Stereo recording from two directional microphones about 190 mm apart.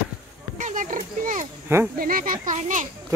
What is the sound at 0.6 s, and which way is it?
Wild animals, 40° right (ahead or behind).